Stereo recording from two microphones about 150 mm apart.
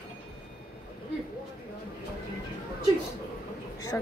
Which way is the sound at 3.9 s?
10° left (ahead or behind).